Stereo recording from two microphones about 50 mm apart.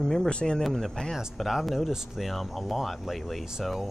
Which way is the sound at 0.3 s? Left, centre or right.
Centre.